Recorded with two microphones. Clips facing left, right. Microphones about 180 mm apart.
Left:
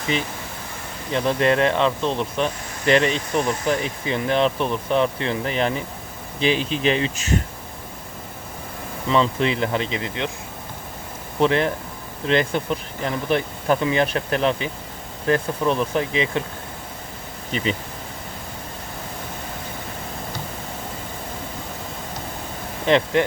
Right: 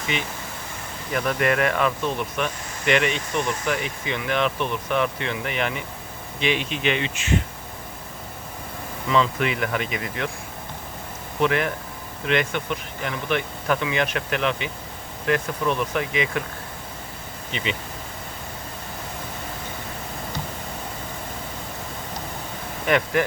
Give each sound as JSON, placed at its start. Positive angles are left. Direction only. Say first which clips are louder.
{"t": 0.1, "sound": "speech", "louder": "left 4 dB", "side_deg": 35}
{"t": 9.0, "sound": "speech", "louder": "left 2 dB", "side_deg": 30}
{"t": 11.3, "sound": "speech", "louder": "left 3 dB", "side_deg": 30}
{"t": 17.5, "sound": "speech", "louder": "left 5 dB", "side_deg": 40}
{"t": 22.9, "sound": "speech", "louder": "left 3 dB", "side_deg": 25}